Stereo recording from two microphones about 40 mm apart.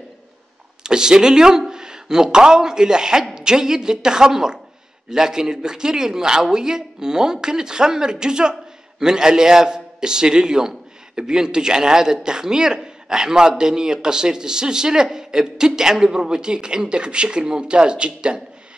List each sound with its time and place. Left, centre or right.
0.8 s a man's voice: centre